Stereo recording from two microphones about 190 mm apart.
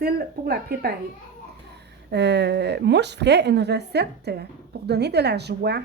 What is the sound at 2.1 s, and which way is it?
A woman's voice, 65° right (ahead or behind).